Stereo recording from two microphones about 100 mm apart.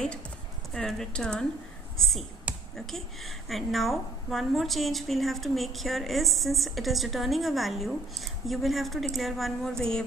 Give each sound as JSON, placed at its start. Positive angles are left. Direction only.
{"t": 0.7, "sound": "a woman's voice", "side_deg": 5}